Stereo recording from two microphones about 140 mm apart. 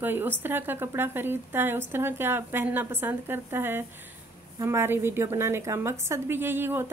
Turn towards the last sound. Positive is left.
turn(degrees=-15)  # may be behind; listen again after turning